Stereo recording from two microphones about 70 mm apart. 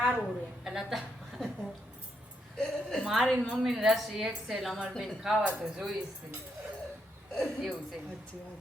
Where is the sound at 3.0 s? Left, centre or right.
Centre.